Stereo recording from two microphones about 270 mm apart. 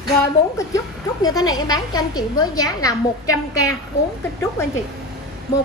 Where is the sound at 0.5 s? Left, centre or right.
Centre.